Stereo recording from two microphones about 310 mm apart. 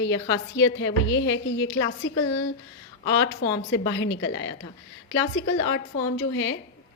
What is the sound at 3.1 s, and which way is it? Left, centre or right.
A woman's voice, left.